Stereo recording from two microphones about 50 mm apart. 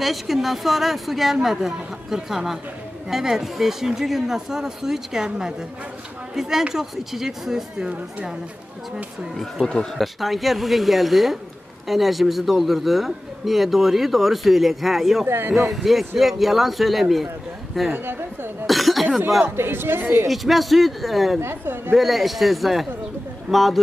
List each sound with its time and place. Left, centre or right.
0.0 s a man's voice: centre
9.6 s speech: centre
9.9 s a man's voice: centre
15.2 s speech: right
15.5 s a man's voice: centre
17.9 s a woman's voice: right
18.7 s speech: centre
19.4 s a woman's voice: right
20.2 s a man's voice: centre
21.4 s speech: right
21.9 s a man's voice: centre